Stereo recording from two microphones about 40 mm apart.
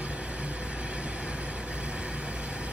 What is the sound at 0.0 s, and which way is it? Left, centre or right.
Vehicle, right.